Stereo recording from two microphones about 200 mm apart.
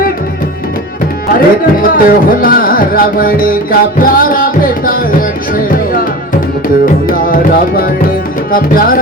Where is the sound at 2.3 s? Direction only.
45° left (ahead or behind).